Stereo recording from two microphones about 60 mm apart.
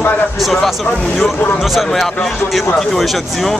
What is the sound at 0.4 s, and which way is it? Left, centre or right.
Speech, centre.